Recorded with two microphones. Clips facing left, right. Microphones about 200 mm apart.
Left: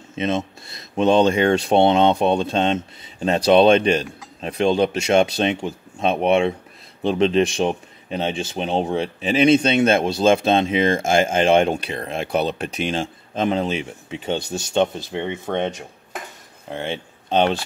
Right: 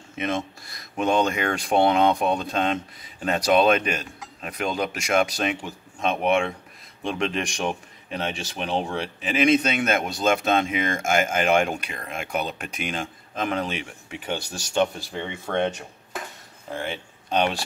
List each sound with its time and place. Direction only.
0.1 s speech: 25° left (ahead or behind)
16.7 s speech: 25° left (ahead or behind)